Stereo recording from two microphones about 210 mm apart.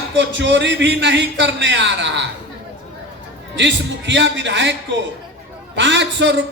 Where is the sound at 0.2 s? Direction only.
55° right (ahead or behind).